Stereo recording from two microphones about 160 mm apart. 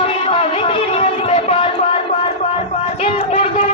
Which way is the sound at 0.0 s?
35° left (ahead or behind).